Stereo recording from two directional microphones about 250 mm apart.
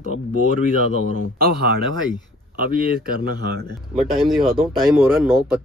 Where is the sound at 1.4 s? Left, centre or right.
Right.